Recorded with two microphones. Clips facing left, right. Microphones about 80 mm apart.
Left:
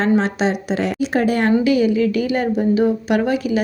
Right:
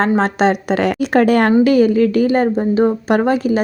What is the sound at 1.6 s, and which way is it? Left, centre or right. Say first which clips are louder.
A woman's voice: right 4 dB; right.